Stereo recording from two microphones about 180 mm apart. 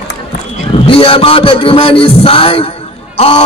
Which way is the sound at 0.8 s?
30° left (ahead or behind).